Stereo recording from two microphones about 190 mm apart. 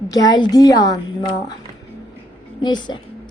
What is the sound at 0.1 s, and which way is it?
A woman's voice, 20° left (ahead or behind).